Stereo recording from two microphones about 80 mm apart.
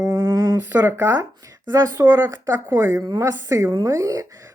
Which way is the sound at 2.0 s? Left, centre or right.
Right.